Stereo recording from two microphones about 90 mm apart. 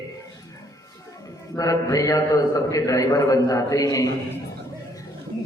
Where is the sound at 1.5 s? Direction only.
40° left (ahead or behind).